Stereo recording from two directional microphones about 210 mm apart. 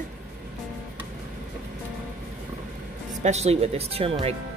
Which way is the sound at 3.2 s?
30° right (ahead or behind).